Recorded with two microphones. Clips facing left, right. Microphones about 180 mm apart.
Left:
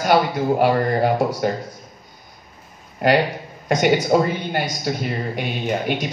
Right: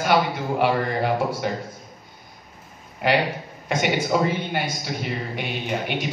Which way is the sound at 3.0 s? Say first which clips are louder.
Left 4 dB; 45° left (ahead or behind).